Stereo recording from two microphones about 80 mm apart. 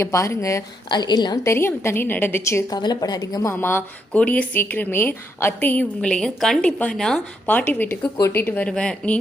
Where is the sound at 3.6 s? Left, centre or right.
Left.